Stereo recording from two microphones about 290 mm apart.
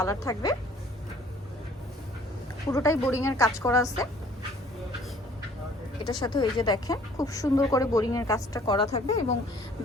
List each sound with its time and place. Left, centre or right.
0.0 s speech: centre
2.6 s speech: centre
6.1 s speech: centre